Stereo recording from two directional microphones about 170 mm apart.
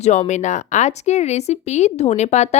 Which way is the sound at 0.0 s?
40° left (ahead or behind).